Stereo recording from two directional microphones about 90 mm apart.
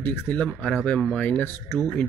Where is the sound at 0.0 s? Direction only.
20° left (ahead or behind).